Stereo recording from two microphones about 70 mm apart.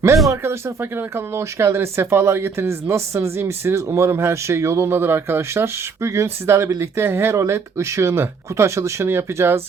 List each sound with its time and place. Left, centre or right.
0.4 s speech: right